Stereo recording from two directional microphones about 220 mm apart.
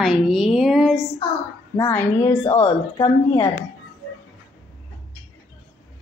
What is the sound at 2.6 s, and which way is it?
Speech, 20° left (ahead or behind).